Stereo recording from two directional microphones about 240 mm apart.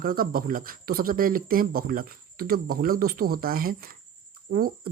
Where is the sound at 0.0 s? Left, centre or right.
Right.